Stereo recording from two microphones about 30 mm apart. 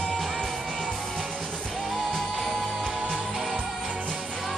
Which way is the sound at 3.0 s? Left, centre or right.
Right.